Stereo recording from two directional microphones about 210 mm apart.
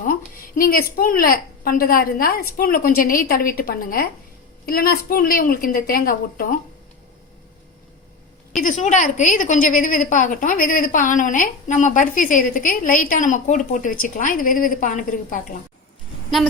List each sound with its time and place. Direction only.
0.5 s a woman's voice: 45° left (ahead or behind)
8.5 s a woman's voice: 35° left (ahead or behind)